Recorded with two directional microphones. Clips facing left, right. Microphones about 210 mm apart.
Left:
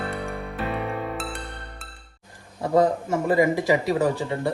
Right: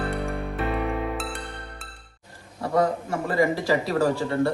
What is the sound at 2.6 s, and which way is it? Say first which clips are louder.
A man's voice: left 3 dB; 20° left (ahead or behind).